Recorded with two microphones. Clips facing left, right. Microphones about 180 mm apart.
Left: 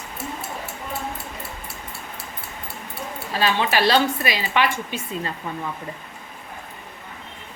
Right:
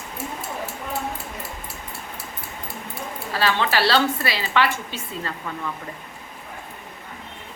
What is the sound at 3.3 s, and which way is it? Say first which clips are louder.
A woman's voice: left 1 dB; 15° left (ahead or behind).